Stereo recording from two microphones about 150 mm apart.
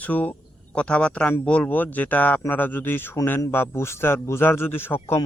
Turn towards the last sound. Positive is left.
turn(degrees=15)  # may be behind; listen again after turning